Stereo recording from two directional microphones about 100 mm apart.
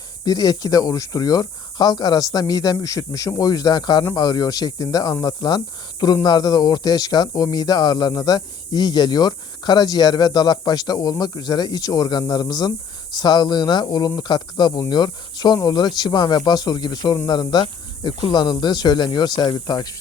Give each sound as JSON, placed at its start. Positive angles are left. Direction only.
{"t": 0.3, "sound": "speech", "side_deg": 40}